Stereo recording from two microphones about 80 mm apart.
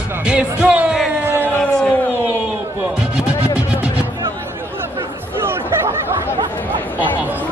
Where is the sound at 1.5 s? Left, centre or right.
Centre.